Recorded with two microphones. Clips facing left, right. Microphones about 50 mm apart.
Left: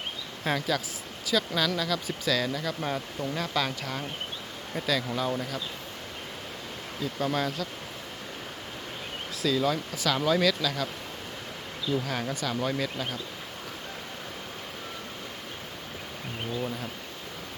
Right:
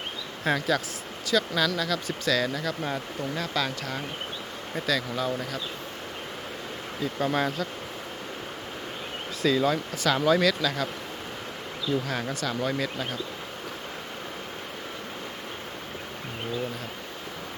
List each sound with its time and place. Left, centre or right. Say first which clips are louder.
0.4 s speech: right 3 dB; centre
7.0 s speech: right 2 dB; centre
9.4 s speech: right 3 dB; centre
12.0 s speech: right 1 dB; centre